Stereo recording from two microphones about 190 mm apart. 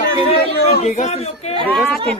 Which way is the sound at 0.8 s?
35° left (ahead or behind).